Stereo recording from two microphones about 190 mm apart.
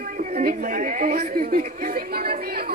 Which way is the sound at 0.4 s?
50° right (ahead or behind).